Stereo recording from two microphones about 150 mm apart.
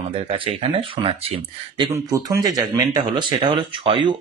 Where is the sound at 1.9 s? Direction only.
20° right (ahead or behind).